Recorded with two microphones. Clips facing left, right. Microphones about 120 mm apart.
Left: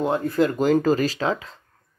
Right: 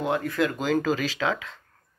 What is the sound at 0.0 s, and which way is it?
Speech, 30° left (ahead or behind).